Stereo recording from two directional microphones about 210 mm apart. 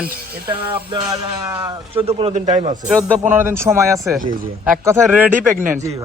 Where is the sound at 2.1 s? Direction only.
30° right (ahead or behind).